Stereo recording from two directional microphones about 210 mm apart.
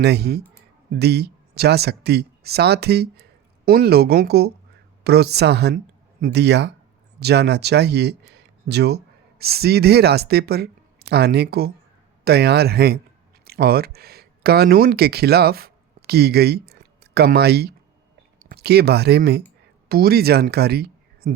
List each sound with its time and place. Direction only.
0.0 s speech: 50° right (ahead or behind)